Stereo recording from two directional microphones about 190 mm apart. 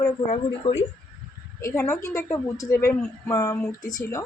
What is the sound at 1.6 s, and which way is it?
A woman's voice, 15° left (ahead or behind).